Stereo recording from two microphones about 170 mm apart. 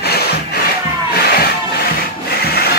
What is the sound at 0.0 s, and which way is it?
Music, 70° left (ahead or behind).